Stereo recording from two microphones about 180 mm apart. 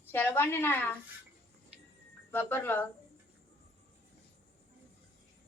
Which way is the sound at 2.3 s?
10° left (ahead or behind).